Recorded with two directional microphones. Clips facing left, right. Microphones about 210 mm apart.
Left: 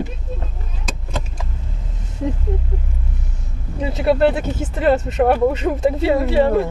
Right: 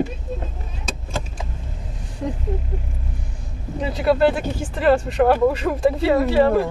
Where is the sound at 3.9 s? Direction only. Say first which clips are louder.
Left 1 dB; 25° left (ahead or behind).